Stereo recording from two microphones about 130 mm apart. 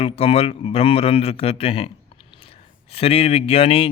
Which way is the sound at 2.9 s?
50° left (ahead or behind).